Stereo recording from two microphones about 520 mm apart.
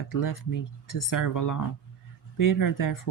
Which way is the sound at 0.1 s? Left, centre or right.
Left.